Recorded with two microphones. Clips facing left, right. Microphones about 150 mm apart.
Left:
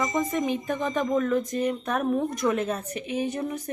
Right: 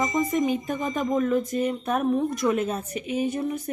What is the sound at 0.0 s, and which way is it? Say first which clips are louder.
Speech: right 2 dB; 15° right (ahead or behind).